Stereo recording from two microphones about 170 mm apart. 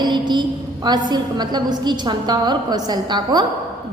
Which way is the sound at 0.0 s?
25° right (ahead or behind).